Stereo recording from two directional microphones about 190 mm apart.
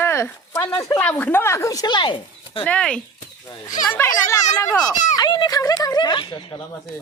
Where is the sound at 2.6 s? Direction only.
5° left (ahead or behind).